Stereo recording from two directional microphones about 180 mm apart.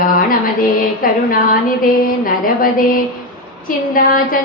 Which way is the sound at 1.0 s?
50° left (ahead or behind).